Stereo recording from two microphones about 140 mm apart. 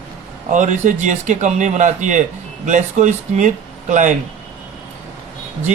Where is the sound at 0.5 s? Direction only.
65° right (ahead or behind).